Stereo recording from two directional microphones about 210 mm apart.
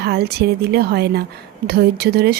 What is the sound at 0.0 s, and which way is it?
Speech, 50° right (ahead or behind).